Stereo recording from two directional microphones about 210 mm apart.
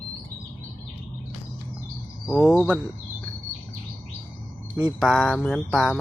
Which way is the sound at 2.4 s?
5° left (ahead or behind).